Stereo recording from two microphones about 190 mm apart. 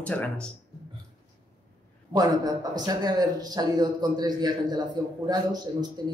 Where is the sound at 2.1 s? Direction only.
20° right (ahead or behind).